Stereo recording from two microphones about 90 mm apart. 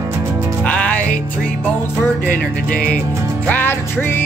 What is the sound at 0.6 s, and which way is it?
Music, 15° left (ahead or behind).